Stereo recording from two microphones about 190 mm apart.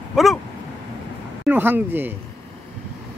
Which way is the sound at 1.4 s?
10° right (ahead or behind).